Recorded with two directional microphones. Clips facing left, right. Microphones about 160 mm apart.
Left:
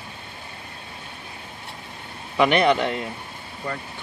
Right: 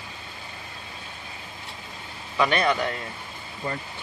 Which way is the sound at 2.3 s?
20° left (ahead or behind).